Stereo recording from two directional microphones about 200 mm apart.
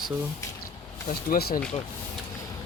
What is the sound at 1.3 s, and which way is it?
Speech, 45° left (ahead or behind).